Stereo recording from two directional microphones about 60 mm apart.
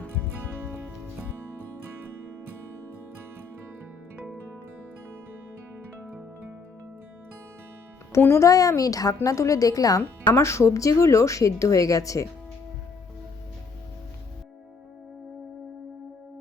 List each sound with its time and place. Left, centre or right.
0.6 s music: right
4.2 s music: right
8.2 s speech: left
8.4 s a woman's voice: left
10.3 s speech: left